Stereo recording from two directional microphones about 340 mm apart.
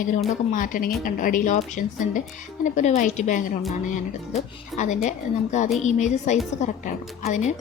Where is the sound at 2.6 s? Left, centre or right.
Left.